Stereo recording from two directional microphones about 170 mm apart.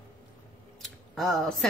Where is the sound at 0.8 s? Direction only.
Centre (ahead or behind).